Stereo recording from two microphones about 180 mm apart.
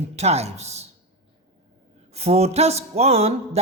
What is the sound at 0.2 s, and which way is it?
Speech, 35° right (ahead or behind).